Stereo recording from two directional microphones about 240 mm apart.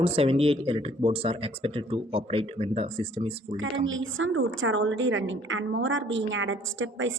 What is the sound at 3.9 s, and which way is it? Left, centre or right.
A woman's voice, right.